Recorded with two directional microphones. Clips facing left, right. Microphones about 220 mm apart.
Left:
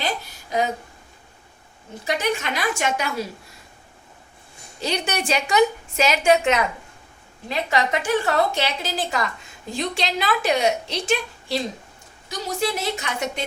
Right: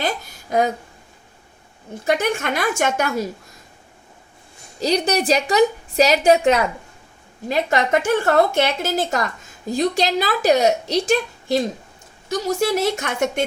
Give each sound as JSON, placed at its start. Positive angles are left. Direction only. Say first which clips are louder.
{"t": 2.0, "sound": "a woman's voice", "louder": "right 4 dB", "side_deg": -50}
{"t": 4.8, "sound": "a woman's voice", "louder": "right 7 dB", "side_deg": -35}